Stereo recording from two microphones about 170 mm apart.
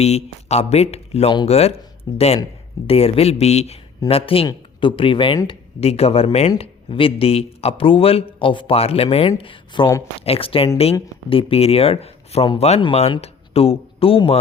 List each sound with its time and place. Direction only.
0.0 s speech: 40° left (ahead or behind)